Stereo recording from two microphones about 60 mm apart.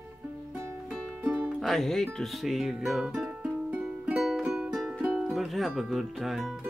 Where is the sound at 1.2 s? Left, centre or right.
Centre.